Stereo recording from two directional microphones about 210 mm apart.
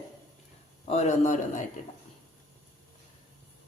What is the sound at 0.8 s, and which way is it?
Speech, 30° left (ahead or behind).